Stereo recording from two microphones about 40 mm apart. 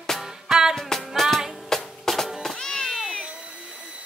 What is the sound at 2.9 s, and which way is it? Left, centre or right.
Cat, centre.